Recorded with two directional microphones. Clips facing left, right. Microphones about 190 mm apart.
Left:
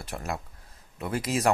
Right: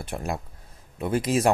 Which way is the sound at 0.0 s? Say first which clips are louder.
Right 3 dB; 25° right (ahead or behind).